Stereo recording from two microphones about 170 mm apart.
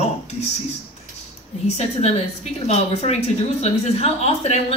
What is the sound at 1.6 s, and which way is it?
A woman's voice, 40° left (ahead or behind).